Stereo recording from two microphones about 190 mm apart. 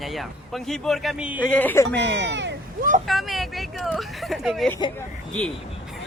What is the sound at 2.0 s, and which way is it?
Speech, 70° right (ahead or behind).